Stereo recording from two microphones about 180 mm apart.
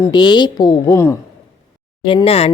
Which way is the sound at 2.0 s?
30° left (ahead or behind).